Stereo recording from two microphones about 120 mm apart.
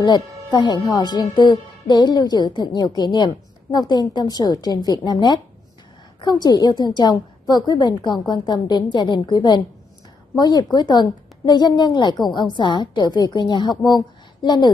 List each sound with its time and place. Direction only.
0.5 s a woman's voice: 40° left (ahead or behind)